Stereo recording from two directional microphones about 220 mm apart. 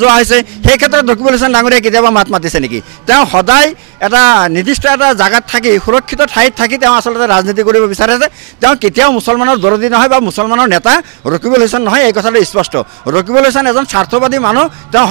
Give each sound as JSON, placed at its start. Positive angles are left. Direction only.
{"t": 0.1, "sound": "a man's voice", "side_deg": -15}